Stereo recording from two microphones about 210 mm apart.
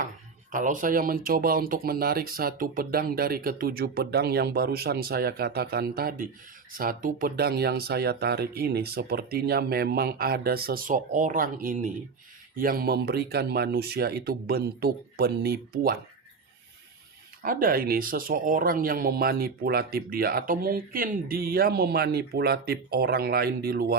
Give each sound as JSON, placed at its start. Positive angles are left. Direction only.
{"t": 0.5, "sound": "speech", "side_deg": -40}
{"t": 17.4, "sound": "speech", "side_deg": -40}